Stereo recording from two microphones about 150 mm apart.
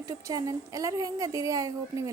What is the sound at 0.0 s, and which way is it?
A woman's voice, 20° right (ahead or behind).